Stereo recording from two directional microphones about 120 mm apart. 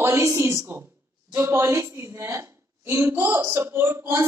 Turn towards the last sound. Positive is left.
turn(degrees=-20)  # may be behind; listen again after turning